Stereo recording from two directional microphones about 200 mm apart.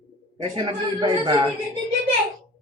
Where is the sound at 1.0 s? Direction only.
20° right (ahead or behind).